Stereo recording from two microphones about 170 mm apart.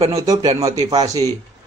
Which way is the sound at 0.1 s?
20° right (ahead or behind).